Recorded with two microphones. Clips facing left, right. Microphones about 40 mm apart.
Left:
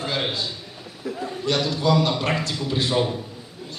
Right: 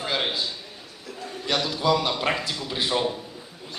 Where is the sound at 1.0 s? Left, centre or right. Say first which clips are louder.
Left 10 dB; centre.